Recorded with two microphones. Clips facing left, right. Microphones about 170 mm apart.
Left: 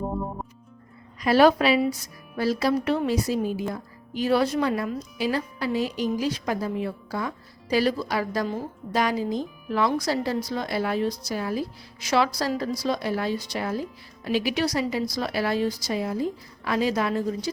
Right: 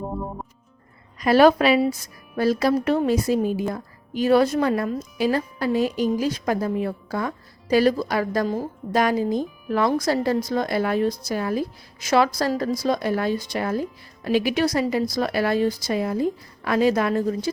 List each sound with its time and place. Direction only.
0.0 s music: centre (ahead or behind)
1.2 s a woman's voice: 50° right (ahead or behind)